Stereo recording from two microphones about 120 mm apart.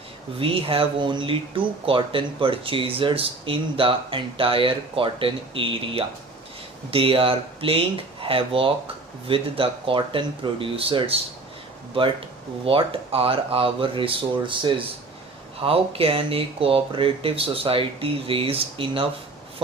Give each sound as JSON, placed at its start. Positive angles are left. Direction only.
{"t": 0.3, "sound": "speech", "side_deg": -50}
{"t": 12.6, "sound": "speech", "side_deg": -50}